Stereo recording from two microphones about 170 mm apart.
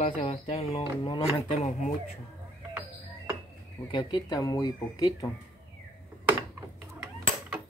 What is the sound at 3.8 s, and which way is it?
Speech, 25° left (ahead or behind).